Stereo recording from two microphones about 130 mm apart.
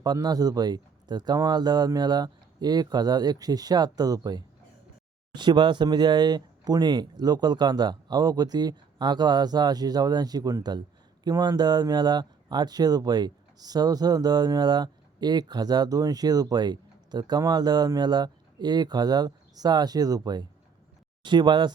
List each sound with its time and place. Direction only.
0.0 s speech: 30° right (ahead or behind)